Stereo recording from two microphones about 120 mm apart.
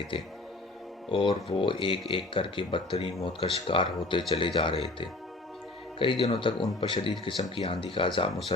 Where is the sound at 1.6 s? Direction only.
45° left (ahead or behind).